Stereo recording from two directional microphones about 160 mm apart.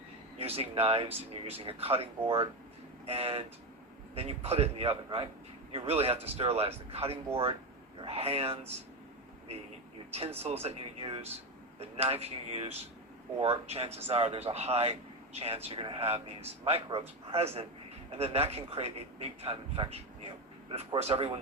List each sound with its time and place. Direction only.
0.3 s a man's voice: 40° right (ahead or behind)
10.1 s a man's voice: 40° right (ahead or behind)